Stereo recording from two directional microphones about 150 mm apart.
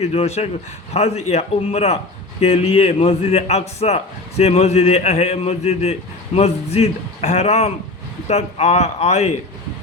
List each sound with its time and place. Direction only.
0.0 s a man's voice: 45° left (ahead or behind)